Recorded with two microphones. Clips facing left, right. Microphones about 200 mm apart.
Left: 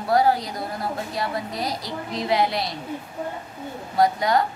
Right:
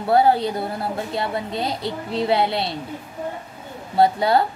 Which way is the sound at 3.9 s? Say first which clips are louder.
Right 3 dB; 30° right (ahead or behind).